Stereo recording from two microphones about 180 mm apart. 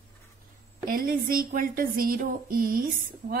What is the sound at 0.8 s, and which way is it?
Speech, 50° right (ahead or behind).